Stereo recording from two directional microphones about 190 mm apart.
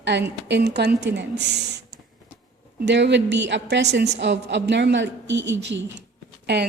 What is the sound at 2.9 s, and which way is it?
A woman's voice, 65° right (ahead or behind).